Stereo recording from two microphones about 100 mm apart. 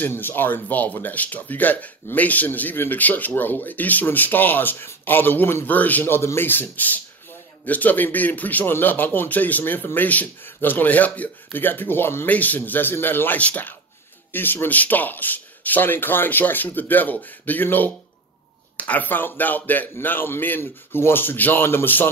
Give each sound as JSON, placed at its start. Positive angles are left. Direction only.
{"t": 0.0, "sound": "a man's voice", "side_deg": 20}